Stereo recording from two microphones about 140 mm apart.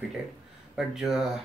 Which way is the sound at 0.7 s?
5° right (ahead or behind).